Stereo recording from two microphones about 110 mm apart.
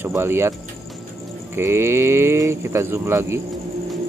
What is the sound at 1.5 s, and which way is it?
Speech, 25° right (ahead or behind).